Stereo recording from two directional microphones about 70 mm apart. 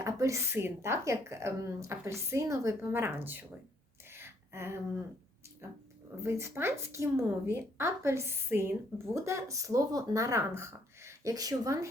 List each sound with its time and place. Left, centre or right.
0.0 s a woman's voice: right
4.1 s a sound: right
5.6 s a woman's voice: right
10.5 s speech: right